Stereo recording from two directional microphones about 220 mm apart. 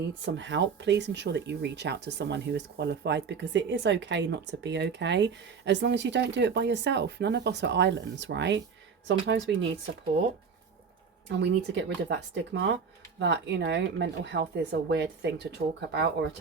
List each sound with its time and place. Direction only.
0.1 s speech: 55° right (ahead or behind)
11.3 s speech: 55° right (ahead or behind)